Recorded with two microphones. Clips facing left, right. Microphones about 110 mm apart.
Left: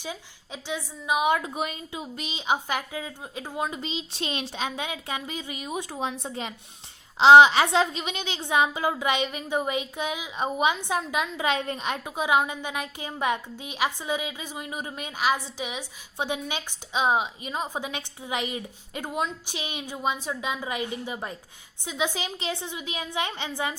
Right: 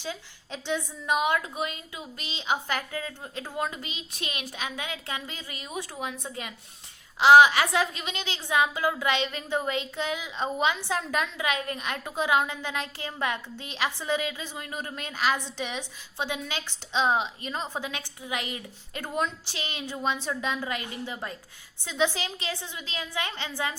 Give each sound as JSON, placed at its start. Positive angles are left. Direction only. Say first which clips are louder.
{"t": 0.0, "sound": "a woman's voice", "louder": "even", "side_deg": 15}
{"t": 11.3, "sound": "a woman's voice", "louder": "left 3 dB", "side_deg": 30}